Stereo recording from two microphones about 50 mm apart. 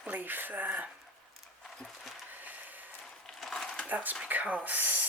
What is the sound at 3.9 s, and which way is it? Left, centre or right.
Speech, right.